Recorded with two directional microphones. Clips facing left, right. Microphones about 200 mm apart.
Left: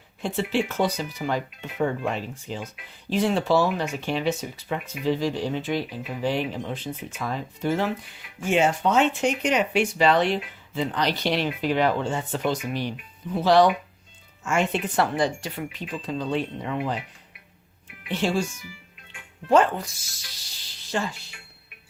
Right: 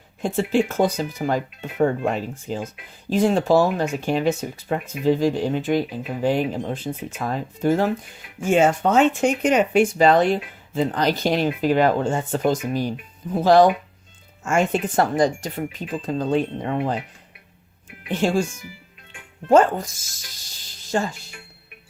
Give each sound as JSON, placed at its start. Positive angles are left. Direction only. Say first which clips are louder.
{"t": 0.2, "sound": "speech", "louder": "right 5 dB", "side_deg": -45}
{"t": 18.1, "sound": "speech", "louder": "right 4 dB", "side_deg": -50}
{"t": 19.5, "sound": "speech", "louder": "right 4 dB", "side_deg": -45}